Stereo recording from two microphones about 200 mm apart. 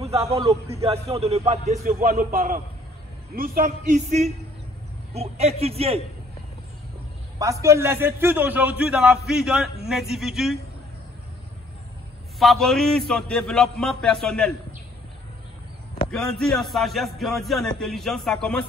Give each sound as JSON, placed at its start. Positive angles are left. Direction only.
{"t": 0.3, "sound": "a man's voice", "side_deg": -30}
{"t": 7.3, "sound": "a man's voice", "side_deg": -15}
{"t": 12.4, "sound": "a man's voice", "side_deg": 0}
{"t": 16.1, "sound": "a man's voice", "side_deg": 5}